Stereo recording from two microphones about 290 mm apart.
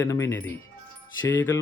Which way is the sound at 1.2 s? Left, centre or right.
Left.